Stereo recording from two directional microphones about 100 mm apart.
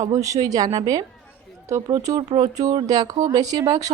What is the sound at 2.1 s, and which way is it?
Speech, 35° right (ahead or behind).